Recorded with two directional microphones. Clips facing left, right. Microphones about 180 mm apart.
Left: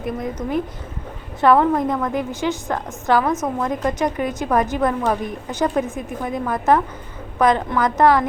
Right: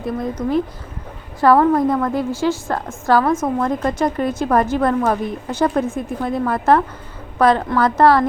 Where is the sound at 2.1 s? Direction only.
20° left (ahead or behind).